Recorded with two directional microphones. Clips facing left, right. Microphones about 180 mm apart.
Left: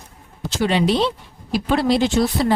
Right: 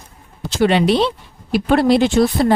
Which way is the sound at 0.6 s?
65° right (ahead or behind).